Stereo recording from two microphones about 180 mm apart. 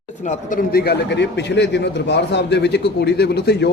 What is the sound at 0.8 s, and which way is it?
A man's voice, 65° left (ahead or behind).